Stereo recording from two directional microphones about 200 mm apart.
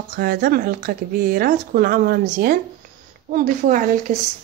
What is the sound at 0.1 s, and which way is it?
Speech, 45° right (ahead or behind).